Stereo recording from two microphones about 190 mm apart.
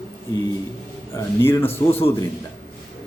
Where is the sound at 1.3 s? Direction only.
10° left (ahead or behind).